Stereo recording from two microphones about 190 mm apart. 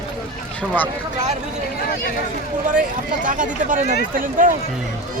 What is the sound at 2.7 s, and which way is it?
Speech, 45° right (ahead or behind).